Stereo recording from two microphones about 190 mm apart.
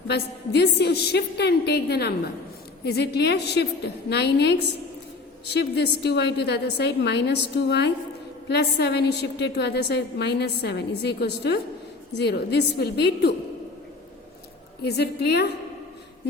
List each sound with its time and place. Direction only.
0.1 s a woman's voice: 60° left (ahead or behind)
5.5 s a woman's voice: 60° left (ahead or behind)
14.8 s a woman's voice: 60° left (ahead or behind)